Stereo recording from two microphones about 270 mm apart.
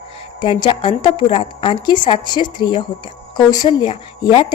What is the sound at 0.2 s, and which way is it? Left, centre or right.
A woman's voice, centre.